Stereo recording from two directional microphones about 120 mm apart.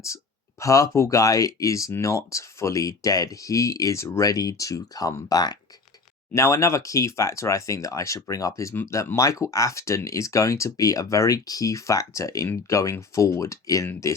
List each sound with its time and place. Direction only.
0.6 s speech: 25° left (ahead or behind)